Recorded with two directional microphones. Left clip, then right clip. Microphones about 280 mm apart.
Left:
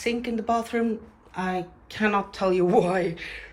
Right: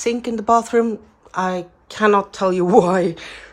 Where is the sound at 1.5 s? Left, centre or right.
Centre.